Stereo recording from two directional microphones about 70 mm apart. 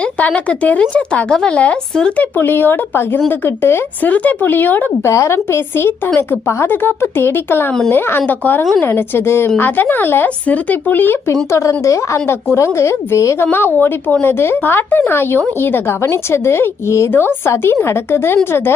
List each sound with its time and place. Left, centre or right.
0.2 s speech: centre
2.4 s speech: left
5.0 s speech: left
11.9 s a woman's voice: left
13.4 s speech: left